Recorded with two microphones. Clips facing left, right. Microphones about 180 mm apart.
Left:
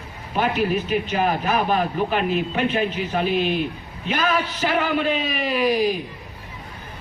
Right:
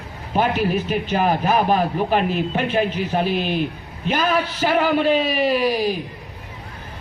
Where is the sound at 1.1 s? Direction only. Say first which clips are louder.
Right 4 dB; 40° right (ahead or behind).